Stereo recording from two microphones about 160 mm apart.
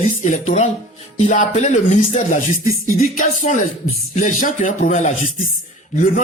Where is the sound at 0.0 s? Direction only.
50° left (ahead or behind).